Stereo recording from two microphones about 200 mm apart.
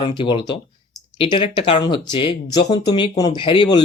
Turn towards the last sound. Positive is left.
turn(degrees=25)  # may be behind; listen again after turning